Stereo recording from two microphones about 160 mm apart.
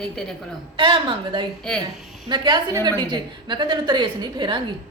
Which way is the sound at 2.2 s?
30° right (ahead or behind).